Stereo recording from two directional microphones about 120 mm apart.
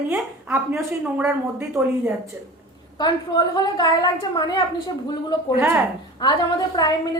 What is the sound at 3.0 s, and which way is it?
A woman's voice, 35° left (ahead or behind).